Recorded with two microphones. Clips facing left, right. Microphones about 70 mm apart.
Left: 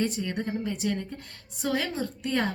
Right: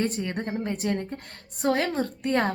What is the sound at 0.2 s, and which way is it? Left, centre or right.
A woman's voice, right.